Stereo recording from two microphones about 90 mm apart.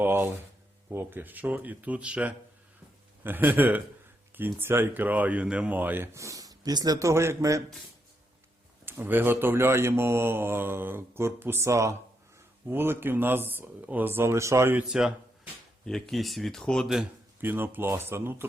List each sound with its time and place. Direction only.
0.0 s a man's voice: 25° right (ahead or behind)
6.1 s speech: 40° right (ahead or behind)
8.8 s a man's voice: 25° right (ahead or behind)
14.8 s speech: 10° right (ahead or behind)
15.9 s speech: 5° left (ahead or behind)
17.4 s a man's voice: 20° right (ahead or behind)